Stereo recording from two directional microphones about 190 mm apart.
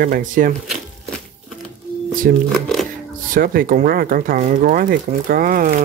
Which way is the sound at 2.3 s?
50° right (ahead or behind).